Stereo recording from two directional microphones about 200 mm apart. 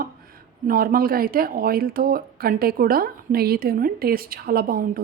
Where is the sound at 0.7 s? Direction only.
45° right (ahead or behind).